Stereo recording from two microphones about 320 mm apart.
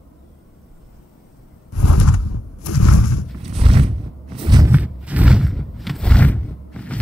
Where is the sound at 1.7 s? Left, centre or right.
Left.